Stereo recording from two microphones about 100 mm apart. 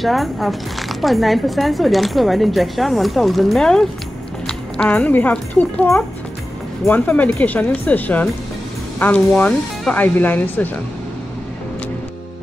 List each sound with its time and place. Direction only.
0.0 s a woman's voice: centre (ahead or behind)
6.9 s speech: 15° left (ahead or behind)